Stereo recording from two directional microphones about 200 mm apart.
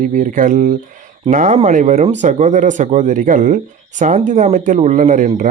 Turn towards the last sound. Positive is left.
turn(degrees=-40)  # may be behind; listen again after turning